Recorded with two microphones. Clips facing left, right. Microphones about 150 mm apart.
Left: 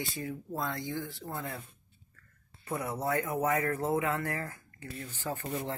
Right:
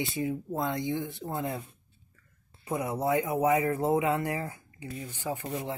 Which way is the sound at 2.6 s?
15° right (ahead or behind).